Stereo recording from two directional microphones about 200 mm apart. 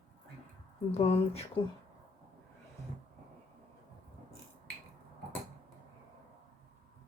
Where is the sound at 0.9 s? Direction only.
30° left (ahead or behind).